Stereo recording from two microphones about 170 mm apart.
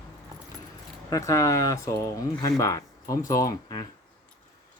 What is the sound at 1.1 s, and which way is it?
Speech, 15° left (ahead or behind).